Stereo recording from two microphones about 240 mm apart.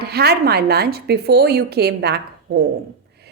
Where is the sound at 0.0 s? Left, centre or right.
Right.